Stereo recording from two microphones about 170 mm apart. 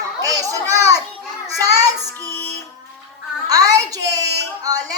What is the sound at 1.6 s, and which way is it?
Child singing, 20° right (ahead or behind).